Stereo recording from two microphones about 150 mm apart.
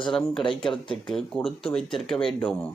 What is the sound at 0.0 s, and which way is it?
A man's voice, 5° left (ahead or behind).